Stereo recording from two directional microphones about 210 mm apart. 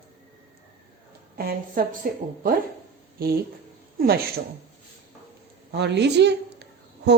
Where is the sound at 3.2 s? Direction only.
45° right (ahead or behind).